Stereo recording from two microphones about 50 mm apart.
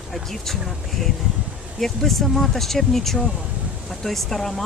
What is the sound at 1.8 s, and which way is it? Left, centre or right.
Speech, centre.